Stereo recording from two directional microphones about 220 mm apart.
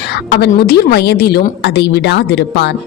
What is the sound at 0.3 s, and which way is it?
A woman's voice, 45° left (ahead or behind).